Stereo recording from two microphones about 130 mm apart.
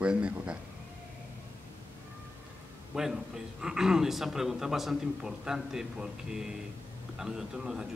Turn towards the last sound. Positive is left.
turn(degrees=-5)  # may be behind; listen again after turning